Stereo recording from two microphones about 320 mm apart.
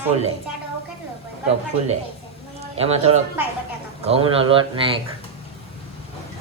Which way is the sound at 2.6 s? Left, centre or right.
Centre.